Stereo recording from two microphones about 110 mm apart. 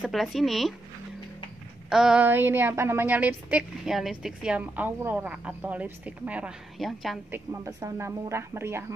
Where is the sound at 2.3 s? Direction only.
20° right (ahead or behind).